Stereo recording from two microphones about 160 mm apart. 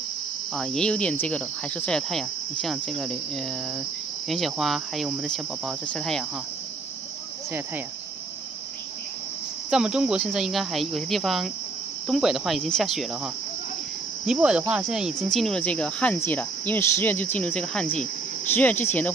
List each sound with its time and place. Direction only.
0.6 s cricket: 5° left (ahead or behind)
9.7 s cricket: 5° right (ahead or behind)
14.7 s speech: 5° right (ahead or behind)
17.8 s speech: 50° left (ahead or behind)
18.5 s speech: 10° left (ahead or behind)